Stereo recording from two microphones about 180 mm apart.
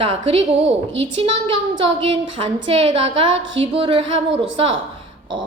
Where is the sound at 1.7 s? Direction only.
30° right (ahead or behind).